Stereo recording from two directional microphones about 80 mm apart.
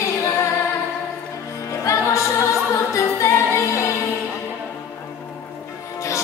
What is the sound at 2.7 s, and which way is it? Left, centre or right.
A capella, left.